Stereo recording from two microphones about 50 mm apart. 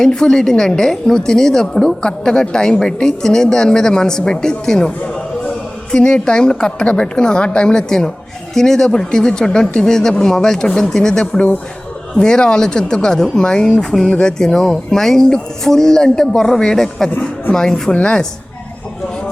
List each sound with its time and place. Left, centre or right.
0.1 s a woman's voice: centre
5.9 s a woman's voice: left